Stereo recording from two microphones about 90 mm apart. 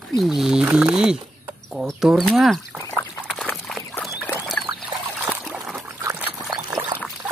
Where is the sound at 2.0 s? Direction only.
Centre (ahead or behind).